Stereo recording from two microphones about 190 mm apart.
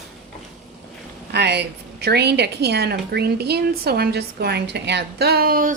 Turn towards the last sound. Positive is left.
turn(degrees=-50)  # may be behind; listen again after turning